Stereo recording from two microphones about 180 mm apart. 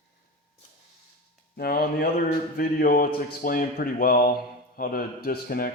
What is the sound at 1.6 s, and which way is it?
Speech, 55° left (ahead or behind).